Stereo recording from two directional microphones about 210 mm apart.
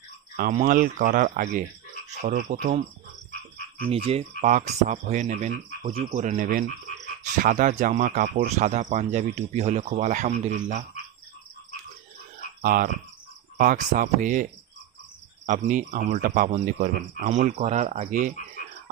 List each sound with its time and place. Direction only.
0.3 s speech: 35° right (ahead or behind)
3.8 s speech: 30° right (ahead or behind)
5.8 s cricket: 25° right (ahead or behind)
6.1 s speech: 40° right (ahead or behind)
12.6 s cricket: 45° right (ahead or behind)
13.6 s speech: 40° right (ahead or behind)